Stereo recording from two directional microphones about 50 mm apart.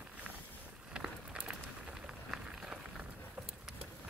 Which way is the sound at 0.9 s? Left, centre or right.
Centre.